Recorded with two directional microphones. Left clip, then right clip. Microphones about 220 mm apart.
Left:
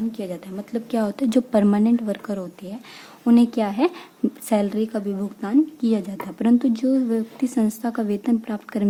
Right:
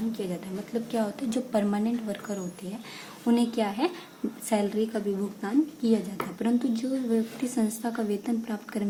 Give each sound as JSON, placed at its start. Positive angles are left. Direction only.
{"t": 0.7, "sound": "a woman's voice", "side_deg": 45}